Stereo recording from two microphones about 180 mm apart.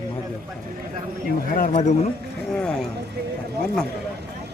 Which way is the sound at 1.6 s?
45° left (ahead or behind).